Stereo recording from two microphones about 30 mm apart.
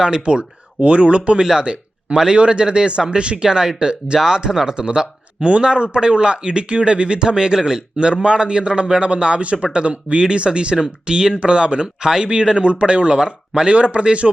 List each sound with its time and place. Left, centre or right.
0.0 s a man's voice: right
1.6 s a sound: right
2.3 s a man's voice: right
5.4 s a man's voice: right
9.4 s a man's voice: right
12.0 s speech: right
12.5 s a man's voice: right